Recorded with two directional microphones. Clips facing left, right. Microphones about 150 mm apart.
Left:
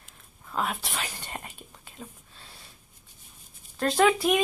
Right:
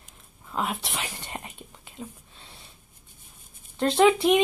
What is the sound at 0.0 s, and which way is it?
Whispering, 15° right (ahead or behind).